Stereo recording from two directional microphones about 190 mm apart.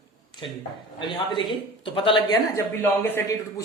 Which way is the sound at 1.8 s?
25° left (ahead or behind).